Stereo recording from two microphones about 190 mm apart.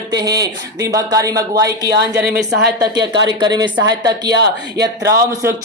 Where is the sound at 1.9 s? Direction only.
60° right (ahead or behind).